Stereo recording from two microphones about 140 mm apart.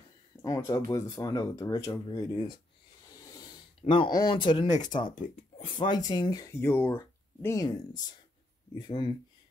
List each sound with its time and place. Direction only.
0.4 s speech: 20° left (ahead or behind)
3.8 s speech: 40° left (ahead or behind)